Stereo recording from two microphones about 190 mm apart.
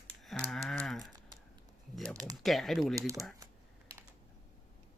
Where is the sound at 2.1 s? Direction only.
20° right (ahead or behind).